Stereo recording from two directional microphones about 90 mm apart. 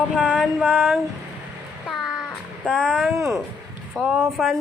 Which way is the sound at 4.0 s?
10° right (ahead or behind).